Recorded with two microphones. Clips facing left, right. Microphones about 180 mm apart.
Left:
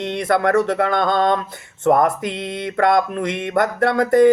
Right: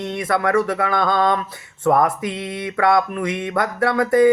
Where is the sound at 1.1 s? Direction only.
50° left (ahead or behind).